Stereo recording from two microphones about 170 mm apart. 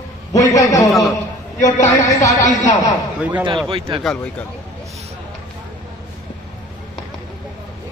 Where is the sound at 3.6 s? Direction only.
30° right (ahead or behind).